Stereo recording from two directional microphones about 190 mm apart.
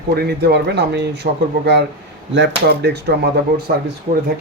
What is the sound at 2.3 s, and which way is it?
Speech, 65° right (ahead or behind).